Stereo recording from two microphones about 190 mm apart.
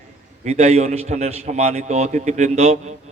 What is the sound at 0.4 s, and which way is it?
A man's voice, 35° right (ahead or behind).